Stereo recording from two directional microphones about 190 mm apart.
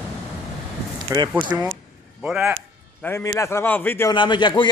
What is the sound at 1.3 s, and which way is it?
Speech, 10° right (ahead or behind).